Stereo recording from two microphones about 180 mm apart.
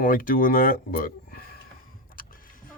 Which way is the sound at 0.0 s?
50° left (ahead or behind).